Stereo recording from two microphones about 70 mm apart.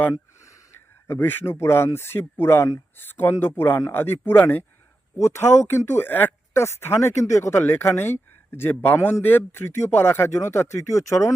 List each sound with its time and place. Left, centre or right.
1.0 s speech: left
3.0 s speech: left